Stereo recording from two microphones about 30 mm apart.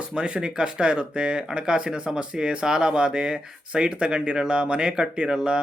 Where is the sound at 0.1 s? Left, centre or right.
Right.